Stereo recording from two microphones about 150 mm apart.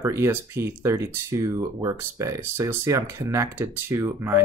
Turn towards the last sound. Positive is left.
turn(degrees=-15)  # may be behind; listen again after turning